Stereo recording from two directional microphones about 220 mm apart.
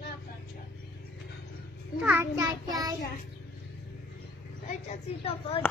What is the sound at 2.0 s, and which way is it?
Child singing, 10° right (ahead or behind).